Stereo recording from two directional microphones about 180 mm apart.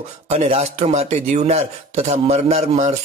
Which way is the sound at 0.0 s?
35° right (ahead or behind).